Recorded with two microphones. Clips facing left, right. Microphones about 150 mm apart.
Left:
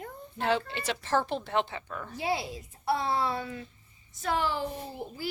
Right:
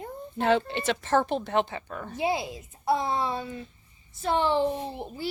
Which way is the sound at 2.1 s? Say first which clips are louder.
Right 3 dB; 20° right (ahead or behind).